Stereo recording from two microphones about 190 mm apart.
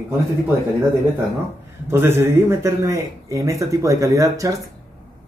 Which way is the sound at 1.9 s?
10° right (ahead or behind).